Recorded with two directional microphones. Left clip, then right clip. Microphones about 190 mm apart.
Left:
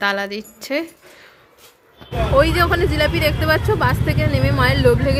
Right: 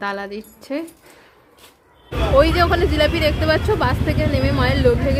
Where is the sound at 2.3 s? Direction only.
5° left (ahead or behind).